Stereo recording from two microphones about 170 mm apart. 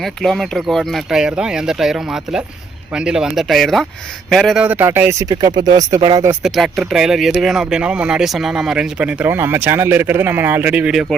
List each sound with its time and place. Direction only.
0.0 s speech: centre (ahead or behind); by 5.3 s 15° right (ahead or behind)
5.3 s speech: 25° right (ahead or behind)
6.4 s speech: centre (ahead or behind)